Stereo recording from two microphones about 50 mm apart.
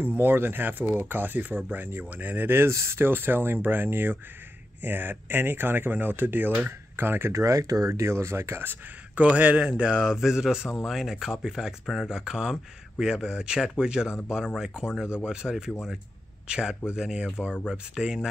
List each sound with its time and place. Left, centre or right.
0.0 s speech: right
2.7 s speech: right
3.1 s speech: right
7.3 s speech: right
9.1 s speech: right
10.0 s speech: centre
11.8 s speech: centre
12.1 s speech: centre